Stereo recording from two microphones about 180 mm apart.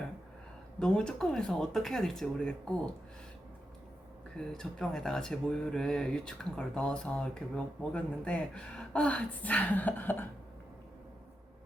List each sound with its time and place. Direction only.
0.8 s speech: 5° left (ahead or behind)
4.4 s speech: 5° left (ahead or behind)